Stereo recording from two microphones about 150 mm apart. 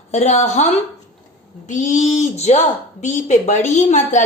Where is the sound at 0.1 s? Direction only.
45° left (ahead or behind).